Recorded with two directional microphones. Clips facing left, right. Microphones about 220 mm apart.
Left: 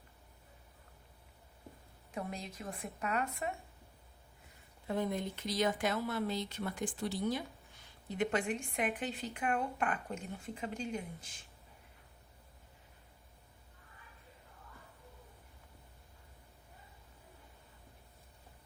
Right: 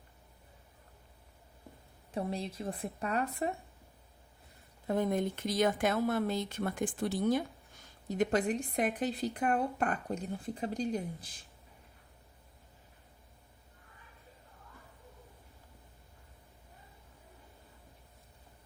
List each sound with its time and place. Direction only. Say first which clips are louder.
2.1 s speech: right 6 dB; 30° right (ahead or behind)
4.9 s speech: right 5 dB; 50° right (ahead or behind)